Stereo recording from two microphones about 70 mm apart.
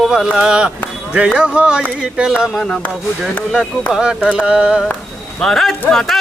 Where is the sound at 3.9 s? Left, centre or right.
Centre.